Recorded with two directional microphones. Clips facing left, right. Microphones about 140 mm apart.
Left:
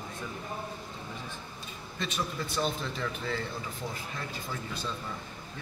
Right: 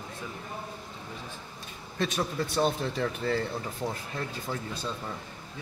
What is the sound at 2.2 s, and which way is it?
Speech, 50° right (ahead or behind).